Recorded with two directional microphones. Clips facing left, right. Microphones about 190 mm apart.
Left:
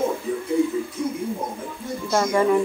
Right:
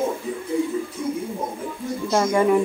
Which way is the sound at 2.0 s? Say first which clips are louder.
Right 1 dB; 15° right (ahead or behind).